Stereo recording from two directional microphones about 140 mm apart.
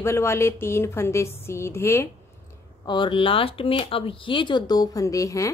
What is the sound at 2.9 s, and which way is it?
A woman's voice, 35° left (ahead or behind).